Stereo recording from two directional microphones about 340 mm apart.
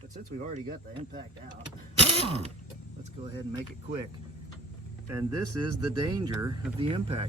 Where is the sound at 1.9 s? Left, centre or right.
Centre.